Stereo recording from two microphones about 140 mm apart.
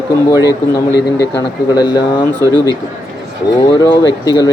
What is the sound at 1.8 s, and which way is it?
Speech, 30° left (ahead or behind).